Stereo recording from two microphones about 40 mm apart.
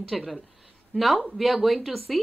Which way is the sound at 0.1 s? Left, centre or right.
Centre.